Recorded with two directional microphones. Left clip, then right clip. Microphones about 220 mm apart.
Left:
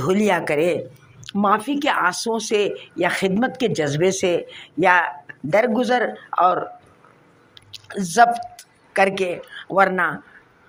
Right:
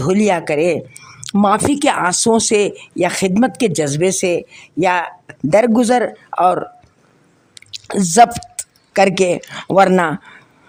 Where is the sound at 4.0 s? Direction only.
30° right (ahead or behind).